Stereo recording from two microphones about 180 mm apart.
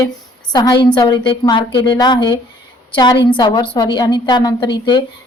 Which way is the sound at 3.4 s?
25° left (ahead or behind).